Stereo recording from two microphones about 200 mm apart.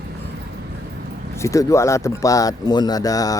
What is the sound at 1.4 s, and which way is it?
Speech, 15° left (ahead or behind).